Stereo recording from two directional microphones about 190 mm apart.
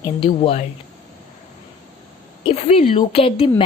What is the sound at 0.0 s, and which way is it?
Speech, 25° left (ahead or behind).